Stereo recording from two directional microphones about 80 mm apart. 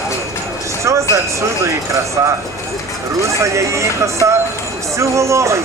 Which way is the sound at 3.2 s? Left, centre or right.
Right.